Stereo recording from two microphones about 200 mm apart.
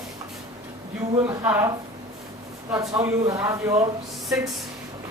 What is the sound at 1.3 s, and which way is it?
Speech, 15° right (ahead or behind).